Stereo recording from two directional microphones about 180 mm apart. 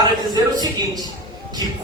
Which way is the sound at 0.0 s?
25° right (ahead or behind).